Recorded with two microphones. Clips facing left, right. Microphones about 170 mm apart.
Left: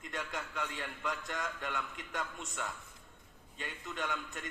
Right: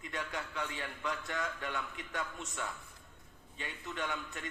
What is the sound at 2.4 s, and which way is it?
Speech, 45° right (ahead or behind).